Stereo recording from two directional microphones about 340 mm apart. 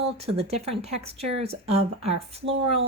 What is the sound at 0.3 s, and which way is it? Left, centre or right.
Speech, centre.